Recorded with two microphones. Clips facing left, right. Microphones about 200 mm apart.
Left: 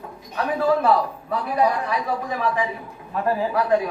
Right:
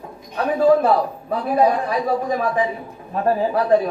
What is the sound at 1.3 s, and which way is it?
A man's voice, 30° right (ahead or behind).